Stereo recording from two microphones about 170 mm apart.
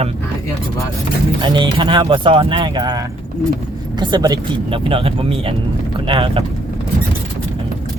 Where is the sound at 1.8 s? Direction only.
30° right (ahead or behind).